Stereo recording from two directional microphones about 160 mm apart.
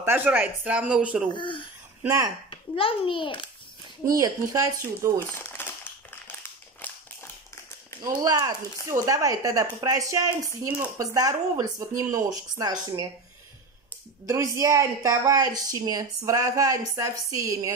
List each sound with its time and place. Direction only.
0.0 s speech: 10° right (ahead or behind)
1.3 s a child's voice: 30° left (ahead or behind)
2.0 s a woman's voice: 20° right (ahead or behind)
2.5 s a child's voice: 35° left (ahead or behind)
4.2 s a woman's voice: 25° right (ahead or behind)
5.3 s crumpling: 15° left (ahead or behind)
6.2 s a sound: 10° left (ahead or behind)
8.0 s a woman's voice: 25° right (ahead or behind)
14.2 s a woman's voice: 20° right (ahead or behind)